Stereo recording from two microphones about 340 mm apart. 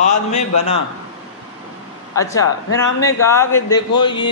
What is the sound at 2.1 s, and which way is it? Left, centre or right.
A man's voice, centre.